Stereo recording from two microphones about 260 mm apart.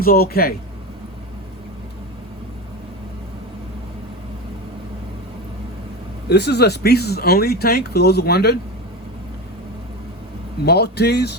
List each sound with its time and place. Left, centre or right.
0.0 s speech: left
6.2 s speech: left
10.7 s speech: left